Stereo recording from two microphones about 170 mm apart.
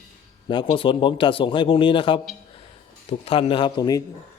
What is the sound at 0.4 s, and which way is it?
A man's voice, 30° left (ahead or behind).